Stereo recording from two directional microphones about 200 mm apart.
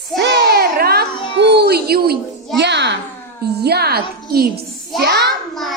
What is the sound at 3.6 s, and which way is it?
Music, 55° right (ahead or behind).